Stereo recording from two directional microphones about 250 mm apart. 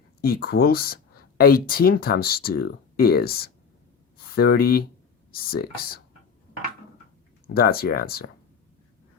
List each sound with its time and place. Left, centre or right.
0.2 s speech: left
7.5 s speech: left